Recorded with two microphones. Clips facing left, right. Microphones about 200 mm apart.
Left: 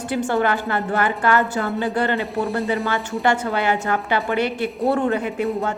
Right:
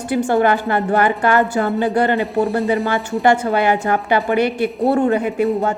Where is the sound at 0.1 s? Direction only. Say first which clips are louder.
Right 5 dB; 15° right (ahead or behind).